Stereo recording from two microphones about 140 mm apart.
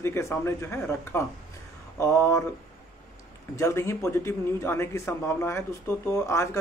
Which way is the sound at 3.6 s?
20° left (ahead or behind).